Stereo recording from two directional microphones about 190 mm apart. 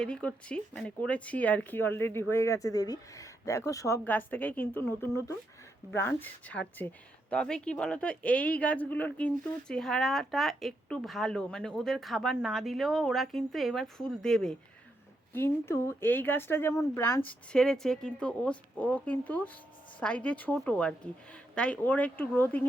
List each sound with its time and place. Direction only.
0.0 s speech: 5° left (ahead or behind)